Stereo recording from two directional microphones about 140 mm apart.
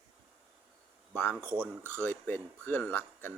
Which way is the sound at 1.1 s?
15° left (ahead or behind).